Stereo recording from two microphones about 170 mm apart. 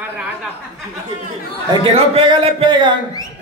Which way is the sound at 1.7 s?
30° right (ahead or behind).